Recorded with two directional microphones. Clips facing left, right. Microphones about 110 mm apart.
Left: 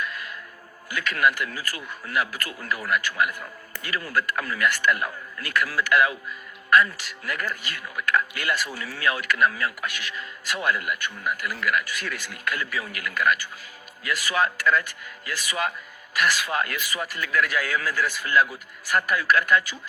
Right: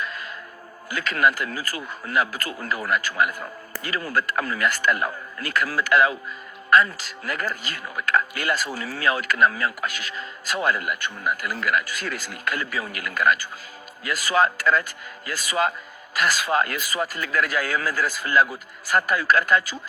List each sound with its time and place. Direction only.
0.0 s music: 30° right (ahead or behind)
0.9 s a man's voice: 35° right (ahead or behind)